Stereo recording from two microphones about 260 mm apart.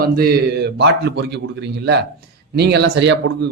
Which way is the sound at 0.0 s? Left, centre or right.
Right.